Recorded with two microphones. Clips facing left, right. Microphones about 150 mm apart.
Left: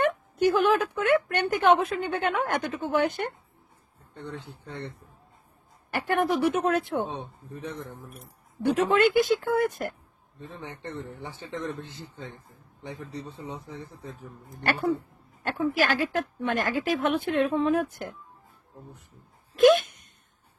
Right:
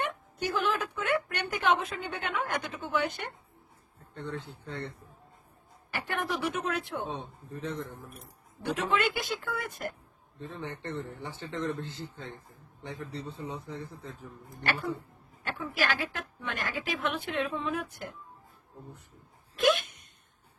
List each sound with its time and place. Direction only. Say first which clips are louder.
0.0 s a woman's voice: left 10 dB; 55° left (ahead or behind)
4.1 s a man's voice: right 1 dB; 20° left (ahead or behind)
5.9 s a woman's voice: left 8 dB; 50° left (ahead or behind)
8.6 s a woman's voice: left 7 dB; 45° left (ahead or behind)
10.4 s speech: even; 15° left (ahead or behind)
14.6 s a woman's voice: left 6 dB; 45° left (ahead or behind)
19.5 s speech: left 8 dB; 45° left (ahead or behind)